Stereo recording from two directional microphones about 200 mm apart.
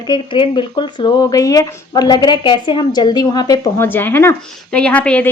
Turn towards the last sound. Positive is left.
turn(degrees=5)  # may be behind; listen again after turning